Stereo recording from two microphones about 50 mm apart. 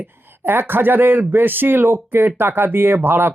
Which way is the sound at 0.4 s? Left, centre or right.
Right.